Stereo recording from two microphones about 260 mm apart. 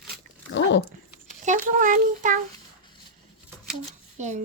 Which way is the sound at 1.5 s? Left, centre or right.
Right.